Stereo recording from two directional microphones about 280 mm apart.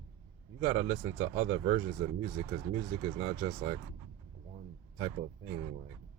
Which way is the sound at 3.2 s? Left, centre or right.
Right.